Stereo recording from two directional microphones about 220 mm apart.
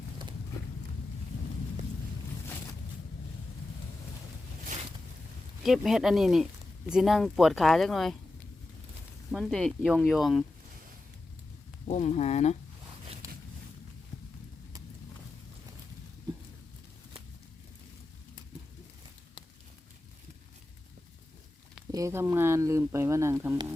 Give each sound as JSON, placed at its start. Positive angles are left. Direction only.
{"t": 4.6, "sound": "boat", "side_deg": -35}
{"t": 5.6, "sound": "speech", "side_deg": 0}
{"t": 9.3, "sound": "speech", "side_deg": 0}
{"t": 11.9, "sound": "speech", "side_deg": 30}
{"t": 16.3, "sound": "a sound", "side_deg": -15}
{"t": 21.9, "sound": "speech", "side_deg": -15}